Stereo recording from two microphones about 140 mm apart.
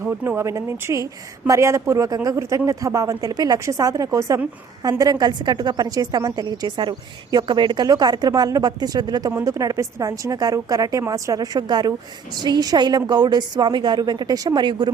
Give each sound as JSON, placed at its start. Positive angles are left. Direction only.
{"t": 0.0, "sound": "a woman's voice", "side_deg": -15}